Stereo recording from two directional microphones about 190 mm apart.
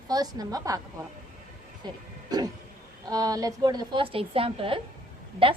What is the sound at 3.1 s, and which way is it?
A woman's voice, 20° right (ahead or behind).